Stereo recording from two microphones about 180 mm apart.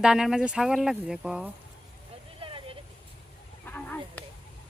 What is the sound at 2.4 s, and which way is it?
Vehicle, 30° right (ahead or behind).